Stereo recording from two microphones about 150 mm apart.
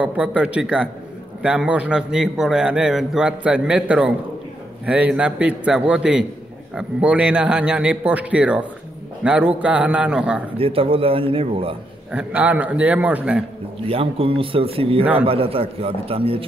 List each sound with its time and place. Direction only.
0.0 s a man's voice: 10° right (ahead or behind)
10.6 s speech: 40° right (ahead or behind)
12.1 s a man's voice: 10° right (ahead or behind)
13.8 s speech: 40° right (ahead or behind)